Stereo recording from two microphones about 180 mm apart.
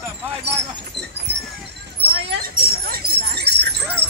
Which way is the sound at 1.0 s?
75° right (ahead or behind).